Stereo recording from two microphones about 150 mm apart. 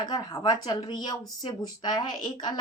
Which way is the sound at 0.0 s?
25° left (ahead or behind).